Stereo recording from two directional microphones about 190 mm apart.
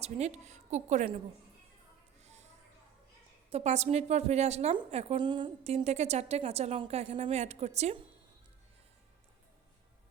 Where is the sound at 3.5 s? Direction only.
35° right (ahead or behind).